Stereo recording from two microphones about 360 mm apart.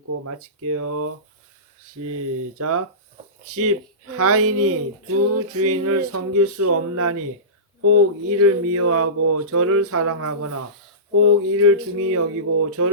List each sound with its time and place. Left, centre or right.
0.3 s speech: right
2.1 s speech: right